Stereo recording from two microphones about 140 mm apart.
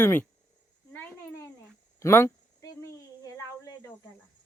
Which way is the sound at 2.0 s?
20° left (ahead or behind).